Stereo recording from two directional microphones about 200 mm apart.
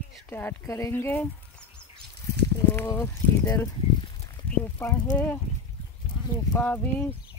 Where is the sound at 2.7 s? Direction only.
10° left (ahead or behind).